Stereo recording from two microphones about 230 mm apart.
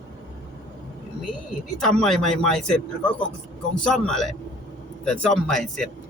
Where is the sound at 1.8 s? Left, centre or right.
Centre.